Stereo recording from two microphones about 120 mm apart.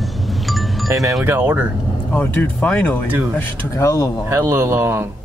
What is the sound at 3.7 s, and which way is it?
Speech, 25° left (ahead or behind).